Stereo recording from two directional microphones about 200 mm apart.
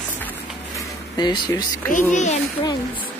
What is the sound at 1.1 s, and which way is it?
Speech, 20° left (ahead or behind).